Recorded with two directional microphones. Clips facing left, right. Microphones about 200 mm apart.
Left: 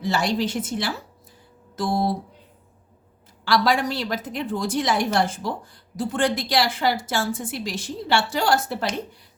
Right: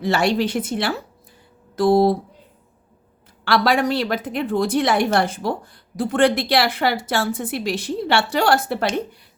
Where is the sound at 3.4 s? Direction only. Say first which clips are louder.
Right 3 dB; 60° right (ahead or behind).